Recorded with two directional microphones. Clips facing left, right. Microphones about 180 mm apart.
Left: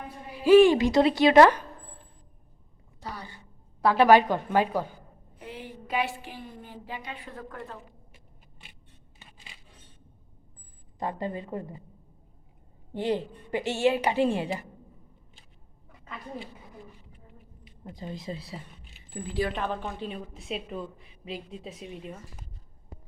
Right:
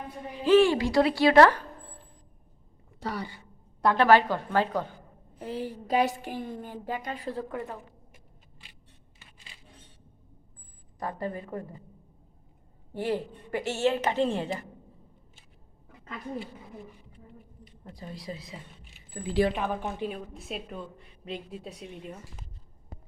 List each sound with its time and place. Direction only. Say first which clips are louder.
0.4 s a woman's voice: left 4 dB; 15° left (ahead or behind)
3.0 s a woman's voice: right 6 dB; 90° right
3.8 s a woman's voice: left 2 dB; 5° left (ahead or behind)
5.4 s a woman's voice: right 7 dB; 40° right (ahead or behind)
11.0 s a woman's voice: left 1 dB; 20° left (ahead or behind)
12.9 s a woman's voice: left 2 dB; 20° left (ahead or behind)
17.9 s a woman's voice: left 3 dB; 25° left (ahead or behind)
19.1 s a woman's voice: even; 15° left (ahead or behind)
19.5 s speech: right 1 dB; 10° right (ahead or behind)
20.1 s a woman's voice: left 2 dB; centre (ahead or behind)